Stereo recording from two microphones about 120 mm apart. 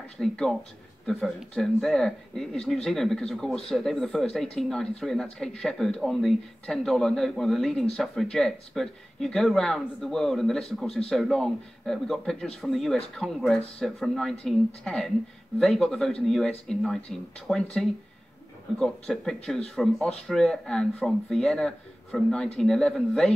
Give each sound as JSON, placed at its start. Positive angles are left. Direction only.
{"t": 0.2, "sound": "speech", "side_deg": 5}